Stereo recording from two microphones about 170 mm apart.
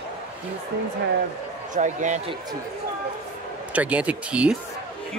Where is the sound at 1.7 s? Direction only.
45° right (ahead or behind).